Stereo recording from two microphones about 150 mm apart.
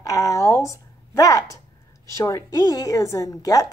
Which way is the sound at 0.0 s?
20° left (ahead or behind).